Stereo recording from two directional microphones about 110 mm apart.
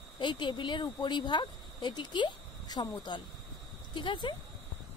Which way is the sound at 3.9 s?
45° left (ahead or behind).